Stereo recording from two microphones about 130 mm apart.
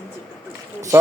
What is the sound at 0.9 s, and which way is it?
Speech, 20° right (ahead or behind).